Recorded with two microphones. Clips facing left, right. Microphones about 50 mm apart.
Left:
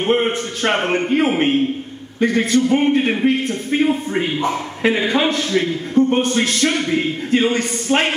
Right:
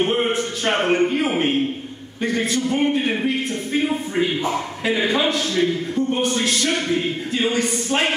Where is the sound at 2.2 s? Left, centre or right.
Left.